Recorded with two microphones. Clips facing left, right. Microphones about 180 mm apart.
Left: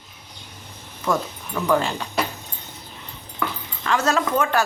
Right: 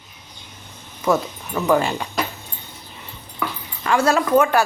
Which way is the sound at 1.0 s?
10° right (ahead or behind).